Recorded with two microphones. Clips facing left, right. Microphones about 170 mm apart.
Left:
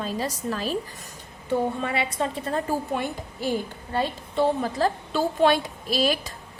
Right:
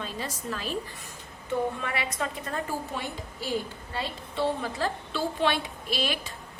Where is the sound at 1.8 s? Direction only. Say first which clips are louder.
Left 5 dB; 30° left (ahead or behind).